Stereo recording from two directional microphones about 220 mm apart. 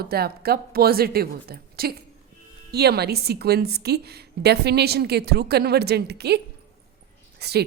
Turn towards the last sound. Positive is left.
turn(degrees=-45)  # may be behind; listen again after turning